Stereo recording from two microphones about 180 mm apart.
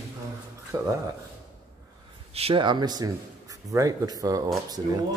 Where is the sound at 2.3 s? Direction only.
30° right (ahead or behind).